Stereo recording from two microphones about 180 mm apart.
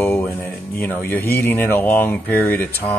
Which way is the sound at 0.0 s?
10° left (ahead or behind).